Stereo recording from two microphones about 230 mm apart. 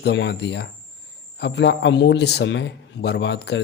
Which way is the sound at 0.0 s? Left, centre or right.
Left.